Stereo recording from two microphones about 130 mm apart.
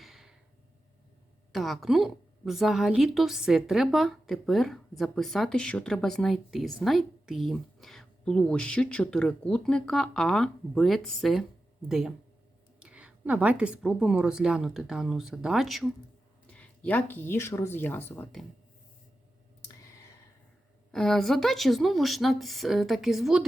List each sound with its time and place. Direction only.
0.0 s a sound: centre (ahead or behind)
1.5 s a woman's voice: centre (ahead or behind)
16.5 s speech: 10° left (ahead or behind)
20.9 s a woman's voice: 5° left (ahead or behind)